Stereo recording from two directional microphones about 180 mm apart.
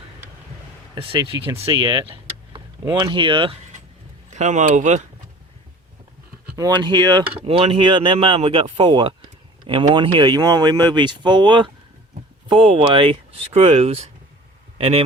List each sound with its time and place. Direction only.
0.9 s speech: 30° right (ahead or behind)
4.3 s speech: 40° right (ahead or behind)
6.6 s speech: 25° right (ahead or behind)